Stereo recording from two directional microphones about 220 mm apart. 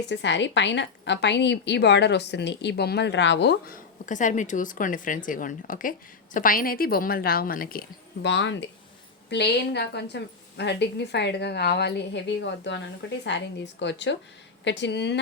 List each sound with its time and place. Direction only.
0.1 s a woman's voice: 55° left (ahead or behind)